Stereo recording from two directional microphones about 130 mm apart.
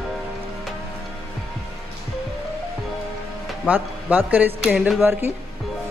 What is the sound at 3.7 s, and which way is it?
A man's voice, 15° right (ahead or behind).